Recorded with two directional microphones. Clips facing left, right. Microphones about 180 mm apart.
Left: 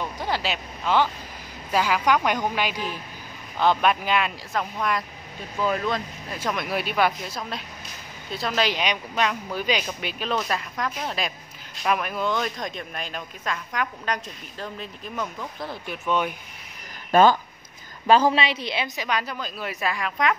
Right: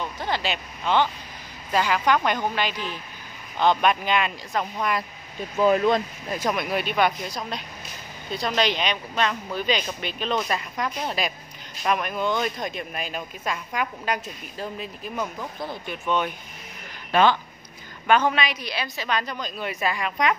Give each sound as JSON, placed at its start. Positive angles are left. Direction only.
{"t": 0.0, "sound": "a woman's voice", "side_deg": 10}
{"t": 5.6, "sound": "speech", "side_deg": -25}
{"t": 6.5, "sound": "speech", "side_deg": 0}
{"t": 17.1, "sound": "speech", "side_deg": 40}
{"t": 18.0, "sound": "a woman's voice", "side_deg": 30}
{"t": 19.0, "sound": "speech", "side_deg": 10}